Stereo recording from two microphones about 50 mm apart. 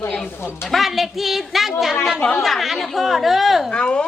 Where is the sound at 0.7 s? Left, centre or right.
Centre.